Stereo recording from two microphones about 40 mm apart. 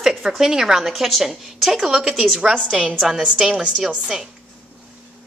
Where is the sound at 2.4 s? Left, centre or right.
Right.